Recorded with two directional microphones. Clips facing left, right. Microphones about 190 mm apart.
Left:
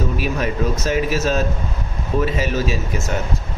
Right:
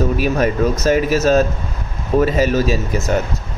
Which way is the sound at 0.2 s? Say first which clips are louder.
Right 5 dB; 45° right (ahead or behind).